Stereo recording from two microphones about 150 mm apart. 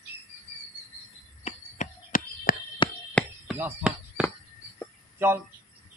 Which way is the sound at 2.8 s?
35° left (ahead or behind).